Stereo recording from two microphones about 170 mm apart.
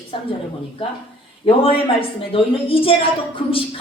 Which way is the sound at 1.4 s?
35° left (ahead or behind).